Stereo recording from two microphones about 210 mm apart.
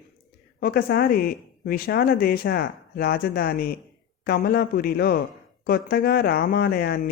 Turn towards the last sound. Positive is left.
turn(degrees=50)  # may be behind; listen again after turning